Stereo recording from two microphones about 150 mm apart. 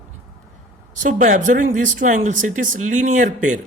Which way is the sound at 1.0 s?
60° right (ahead or behind).